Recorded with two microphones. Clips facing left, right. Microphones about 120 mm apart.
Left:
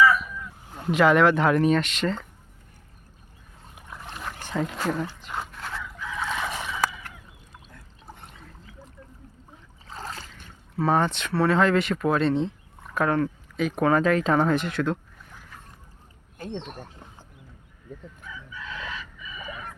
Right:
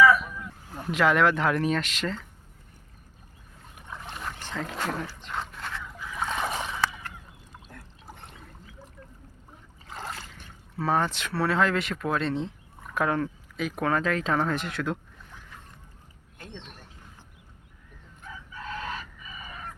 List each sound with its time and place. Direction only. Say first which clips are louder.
0.9 s speech: left 4 dB; centre (ahead or behind)
4.0 s dog: left 1 dB; centre (ahead or behind)
4.4 s wild animals: left 8 dB; 10° left (ahead or behind)
4.7 s speech: left 4 dB; centre (ahead or behind)
6.2 s a sound: right 1 dB; 30° right (ahead or behind)
10.8 s speech: left 3 dB; centre (ahead or behind)
16.6 s speech: left 9 dB; 50° left (ahead or behind)
18.2 s chicken: left 1 dB; 45° right (ahead or behind)